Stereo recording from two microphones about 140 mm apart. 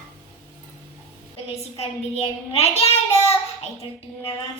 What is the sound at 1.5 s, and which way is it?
A child's voice, 45° left (ahead or behind).